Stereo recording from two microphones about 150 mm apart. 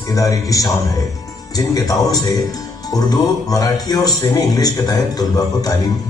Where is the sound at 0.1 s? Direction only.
20° left (ahead or behind).